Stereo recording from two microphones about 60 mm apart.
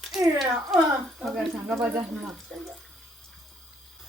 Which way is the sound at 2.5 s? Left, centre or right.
Centre.